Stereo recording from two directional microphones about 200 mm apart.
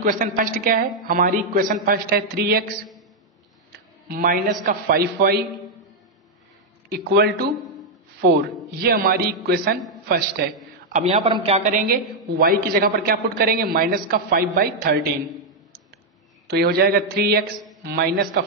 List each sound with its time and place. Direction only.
0.0 s a man's voice: 45° right (ahead or behind)
4.1 s a man's voice: 45° right (ahead or behind)
6.9 s a man's voice: 55° right (ahead or behind)
10.9 s a woman's voice: 35° right (ahead or behind)
16.4 s a man's voice: 55° right (ahead or behind)